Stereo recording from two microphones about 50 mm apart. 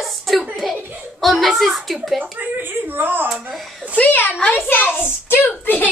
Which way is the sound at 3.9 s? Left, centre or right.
Left.